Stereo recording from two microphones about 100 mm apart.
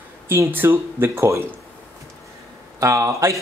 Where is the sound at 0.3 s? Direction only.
20° right (ahead or behind).